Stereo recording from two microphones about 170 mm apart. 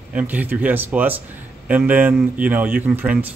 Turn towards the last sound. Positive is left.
turn(degrees=-10)  # may be behind; listen again after turning